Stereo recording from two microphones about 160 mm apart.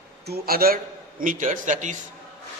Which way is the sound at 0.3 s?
70° right (ahead or behind).